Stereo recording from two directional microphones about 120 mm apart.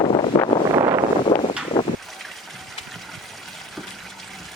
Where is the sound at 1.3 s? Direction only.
35° left (ahead or behind).